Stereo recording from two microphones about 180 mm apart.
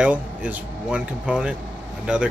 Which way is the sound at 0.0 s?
10° right (ahead or behind).